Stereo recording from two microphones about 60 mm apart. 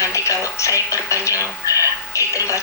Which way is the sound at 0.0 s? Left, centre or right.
Left.